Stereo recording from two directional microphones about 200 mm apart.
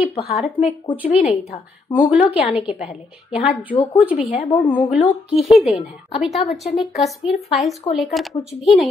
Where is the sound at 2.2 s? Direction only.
30° left (ahead or behind).